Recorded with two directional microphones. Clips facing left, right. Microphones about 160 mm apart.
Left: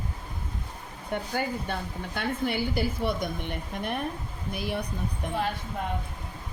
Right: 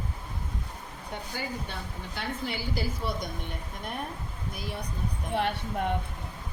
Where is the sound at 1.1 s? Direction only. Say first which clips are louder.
Left 6 dB; 55° left (ahead or behind).